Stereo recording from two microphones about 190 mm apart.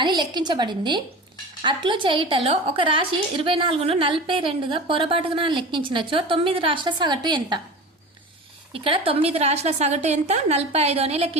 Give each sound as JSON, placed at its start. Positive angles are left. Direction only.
{"t": 0.0, "sound": "a woman's voice", "side_deg": -25}
{"t": 8.7, "sound": "a woman's voice", "side_deg": -30}